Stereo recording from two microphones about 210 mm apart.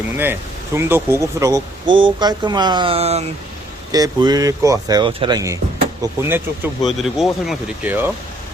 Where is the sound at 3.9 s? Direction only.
20° right (ahead or behind).